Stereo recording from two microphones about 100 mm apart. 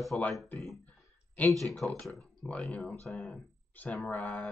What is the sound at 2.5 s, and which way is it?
Speech, 10° left (ahead or behind).